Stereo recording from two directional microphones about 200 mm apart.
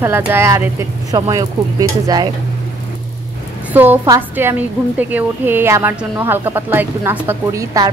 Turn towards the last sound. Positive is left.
turn(degrees=-15)  # may be behind; listen again after turning